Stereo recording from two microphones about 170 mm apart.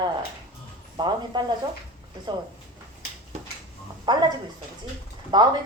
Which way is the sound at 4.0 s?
25° right (ahead or behind).